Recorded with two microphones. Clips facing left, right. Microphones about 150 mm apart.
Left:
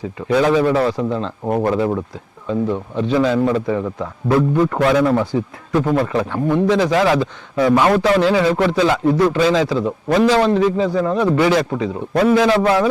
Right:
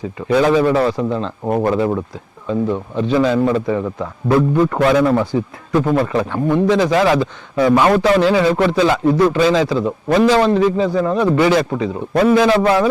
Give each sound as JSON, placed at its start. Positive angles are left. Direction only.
{"t": 0.3, "sound": "a man's voice", "side_deg": -25}
{"t": 6.1, "sound": "a man's voice", "side_deg": -20}
{"t": 9.3, "sound": "a man's voice", "side_deg": -15}
{"t": 9.7, "sound": "a man's voice", "side_deg": -25}
{"t": 10.2, "sound": "a man's voice", "side_deg": -10}